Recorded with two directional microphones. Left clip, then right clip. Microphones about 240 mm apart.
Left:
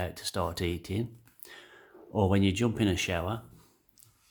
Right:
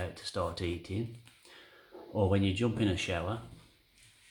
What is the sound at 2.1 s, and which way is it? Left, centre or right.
Speech, left.